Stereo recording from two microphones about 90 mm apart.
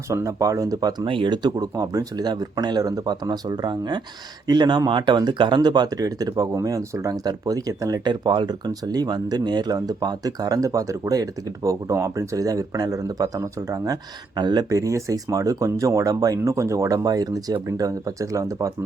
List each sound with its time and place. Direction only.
0.1 s speech: 35° right (ahead or behind)
1.0 s speech: 65° right (ahead or behind); by 8.0 s 40° right (ahead or behind)
8.0 s speech: 60° right (ahead or behind); by 18.7 s 35° right (ahead or behind)